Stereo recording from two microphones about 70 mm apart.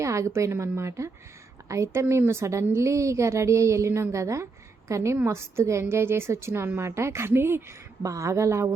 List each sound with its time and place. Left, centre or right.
0.0 s a woman's voice: right
8.0 s a woman's voice: right